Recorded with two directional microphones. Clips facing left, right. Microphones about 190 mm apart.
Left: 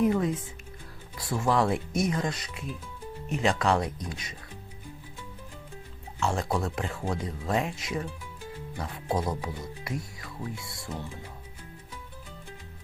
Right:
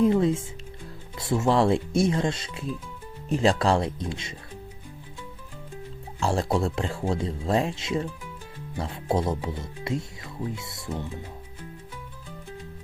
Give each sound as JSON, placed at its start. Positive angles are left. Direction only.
{"t": 0.0, "sound": "speech", "side_deg": -25}
{"t": 6.1, "sound": "speech", "side_deg": -30}